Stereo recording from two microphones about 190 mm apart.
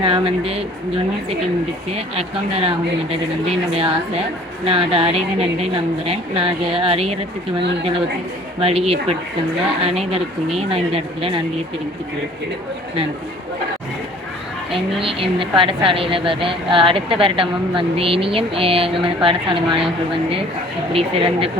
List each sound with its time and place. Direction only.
0.0 s a woman's voice: 30° right (ahead or behind)
2.0 s speech: 30° right (ahead or behind)
8.6 s a woman's voice: 30° right (ahead or behind)
15.0 s a woman's voice: 30° right (ahead or behind)
20.9 s a woman's voice: 30° right (ahead or behind)